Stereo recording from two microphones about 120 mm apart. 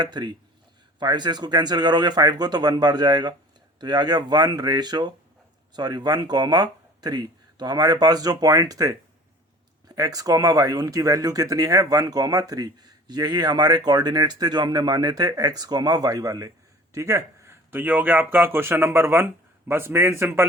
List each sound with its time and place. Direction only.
0.0 s speech: 35° right (ahead or behind); by 20.5 s 20° right (ahead or behind)